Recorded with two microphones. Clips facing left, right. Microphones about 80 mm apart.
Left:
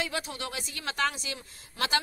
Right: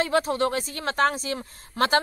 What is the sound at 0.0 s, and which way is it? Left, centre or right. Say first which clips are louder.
Speech: right 11 dB; right.